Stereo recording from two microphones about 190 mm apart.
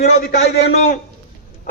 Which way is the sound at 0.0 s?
45° left (ahead or behind).